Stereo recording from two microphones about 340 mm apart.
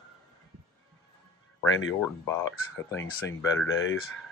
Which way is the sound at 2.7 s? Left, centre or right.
Left.